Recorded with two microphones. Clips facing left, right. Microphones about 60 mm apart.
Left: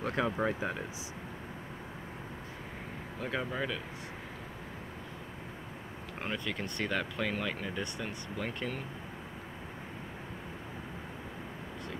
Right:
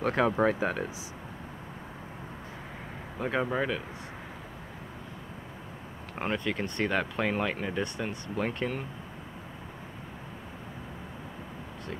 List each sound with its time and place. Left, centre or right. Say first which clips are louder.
0.1 s speech: right 6 dB; right
3.2 s speech: right 6 dB; right
3.4 s speech: right 6 dB; right
6.2 s speech: right 6 dB; right